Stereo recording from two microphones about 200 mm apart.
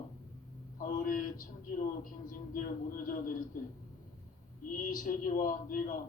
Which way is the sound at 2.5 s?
40° left (ahead or behind).